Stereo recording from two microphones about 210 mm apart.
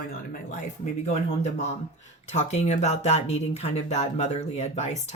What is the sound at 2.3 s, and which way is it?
Speech, 30° left (ahead or behind).